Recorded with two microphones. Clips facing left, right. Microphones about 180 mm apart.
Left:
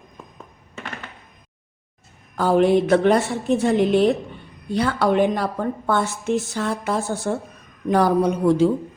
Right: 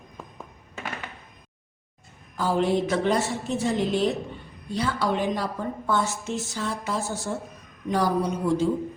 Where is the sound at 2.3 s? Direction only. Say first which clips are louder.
Left 7 dB; 60° left (ahead or behind).